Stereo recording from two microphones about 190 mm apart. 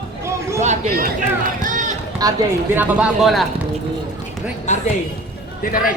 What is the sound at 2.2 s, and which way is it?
Speech, 20° right (ahead or behind).